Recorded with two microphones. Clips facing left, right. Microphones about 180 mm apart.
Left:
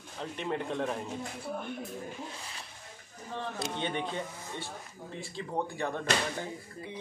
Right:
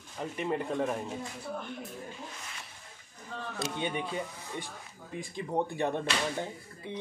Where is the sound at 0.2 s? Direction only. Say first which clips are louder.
Right 2 dB; 5° right (ahead or behind).